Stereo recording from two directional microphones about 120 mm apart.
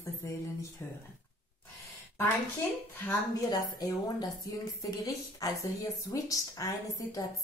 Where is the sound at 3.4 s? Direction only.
35° left (ahead or behind).